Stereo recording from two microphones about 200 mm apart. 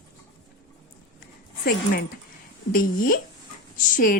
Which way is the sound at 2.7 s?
45° left (ahead or behind).